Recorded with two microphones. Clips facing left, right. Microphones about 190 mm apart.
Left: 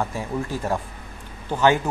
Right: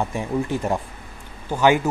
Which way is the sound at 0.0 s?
20° right (ahead or behind).